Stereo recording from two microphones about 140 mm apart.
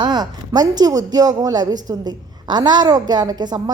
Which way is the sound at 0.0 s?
30° right (ahead or behind).